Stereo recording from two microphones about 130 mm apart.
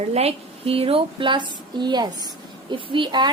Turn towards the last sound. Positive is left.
turn(degrees=-35)  # may be behind; listen again after turning